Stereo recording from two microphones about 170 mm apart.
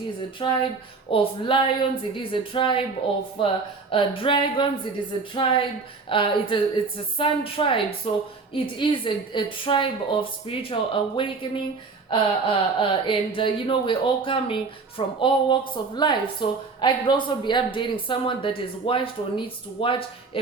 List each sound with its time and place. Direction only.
0.4 s a woman's voice: 30° left (ahead or behind)